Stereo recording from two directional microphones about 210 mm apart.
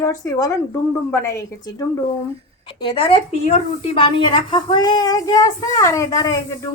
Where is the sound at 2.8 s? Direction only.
25° left (ahead or behind).